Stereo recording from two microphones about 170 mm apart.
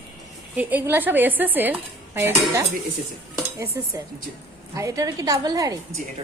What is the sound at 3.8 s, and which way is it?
A woman's voice, 20° right (ahead or behind).